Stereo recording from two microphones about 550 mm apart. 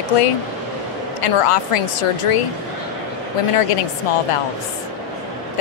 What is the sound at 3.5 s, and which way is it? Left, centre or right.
Speech, left.